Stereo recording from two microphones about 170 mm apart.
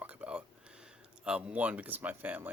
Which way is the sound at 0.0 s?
10° right (ahead or behind).